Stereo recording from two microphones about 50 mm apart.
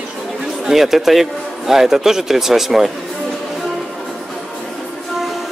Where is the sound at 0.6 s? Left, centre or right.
Centre.